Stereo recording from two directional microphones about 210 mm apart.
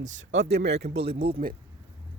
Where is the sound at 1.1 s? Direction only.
25° right (ahead or behind).